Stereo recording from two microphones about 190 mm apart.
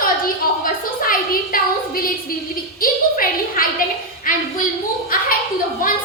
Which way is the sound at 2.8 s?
50° left (ahead or behind).